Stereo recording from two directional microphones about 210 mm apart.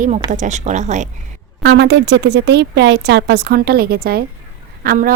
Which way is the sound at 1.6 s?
50° right (ahead or behind).